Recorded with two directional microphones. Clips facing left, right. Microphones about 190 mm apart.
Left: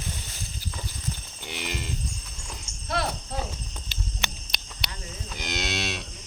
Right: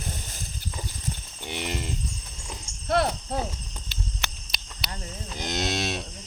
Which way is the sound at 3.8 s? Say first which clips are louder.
Even; centre (ahead or behind).